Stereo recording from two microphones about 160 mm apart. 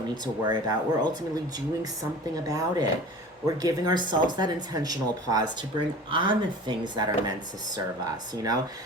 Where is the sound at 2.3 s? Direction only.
25° right (ahead or behind).